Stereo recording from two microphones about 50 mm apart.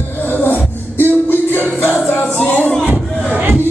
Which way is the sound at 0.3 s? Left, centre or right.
Left.